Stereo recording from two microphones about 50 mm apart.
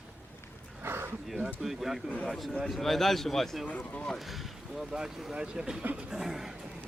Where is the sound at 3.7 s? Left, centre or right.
Left.